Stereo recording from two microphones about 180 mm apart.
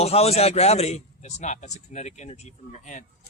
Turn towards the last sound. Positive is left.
turn(degrees=45)  # may be behind; listen again after turning